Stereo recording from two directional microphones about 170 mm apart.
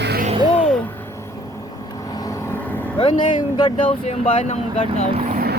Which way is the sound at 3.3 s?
25° left (ahead or behind).